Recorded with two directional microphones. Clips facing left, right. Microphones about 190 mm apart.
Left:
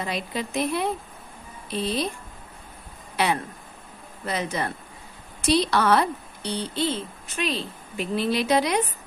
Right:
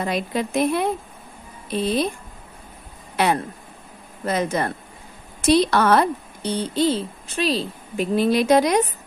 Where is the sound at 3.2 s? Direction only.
50° right (ahead or behind).